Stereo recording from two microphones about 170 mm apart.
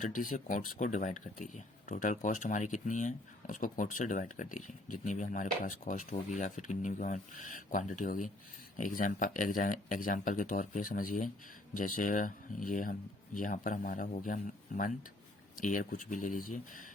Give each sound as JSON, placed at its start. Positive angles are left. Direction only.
{"t": 0.0, "sound": "speech", "side_deg": 50}